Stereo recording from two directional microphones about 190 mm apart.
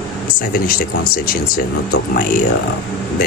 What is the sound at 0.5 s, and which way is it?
Speech, 50° left (ahead or behind).